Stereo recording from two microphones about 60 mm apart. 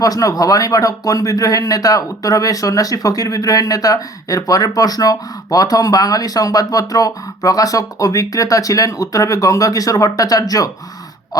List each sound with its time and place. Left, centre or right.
0.0 s speech: left